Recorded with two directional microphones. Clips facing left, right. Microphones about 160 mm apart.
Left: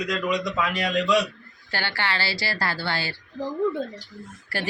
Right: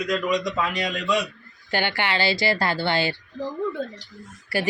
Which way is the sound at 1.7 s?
20° right (ahead or behind).